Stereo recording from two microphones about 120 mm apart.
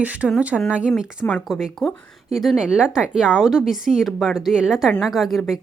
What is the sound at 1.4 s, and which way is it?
A woman's voice, 5° right (ahead or behind).